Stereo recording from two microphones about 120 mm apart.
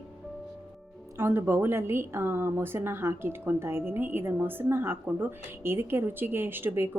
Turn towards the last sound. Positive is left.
turn(degrees=-20)  # may be behind; listen again after turning